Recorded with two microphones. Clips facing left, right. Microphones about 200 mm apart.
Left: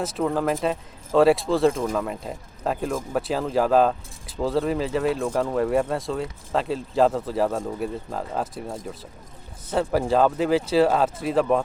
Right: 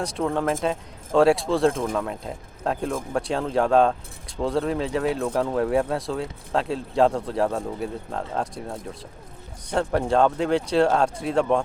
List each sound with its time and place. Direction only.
0.0 s speech: 5° left (ahead or behind)